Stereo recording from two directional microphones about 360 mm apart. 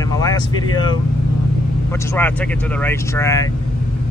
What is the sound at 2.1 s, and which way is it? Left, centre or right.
Speech, centre.